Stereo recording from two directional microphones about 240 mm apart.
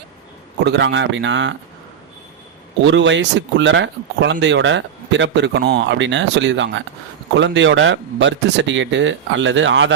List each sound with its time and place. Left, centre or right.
0.6 s speech: right
2.8 s speech: right